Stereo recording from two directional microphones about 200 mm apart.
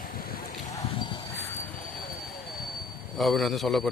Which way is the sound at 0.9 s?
25° left (ahead or behind).